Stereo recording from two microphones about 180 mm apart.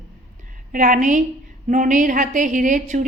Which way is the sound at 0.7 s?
50° right (ahead or behind).